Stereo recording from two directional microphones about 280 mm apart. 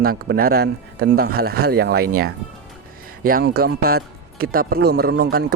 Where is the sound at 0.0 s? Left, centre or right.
Right.